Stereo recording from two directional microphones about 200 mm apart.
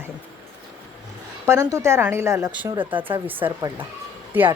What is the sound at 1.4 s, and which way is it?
A woman's voice, 15° right (ahead or behind).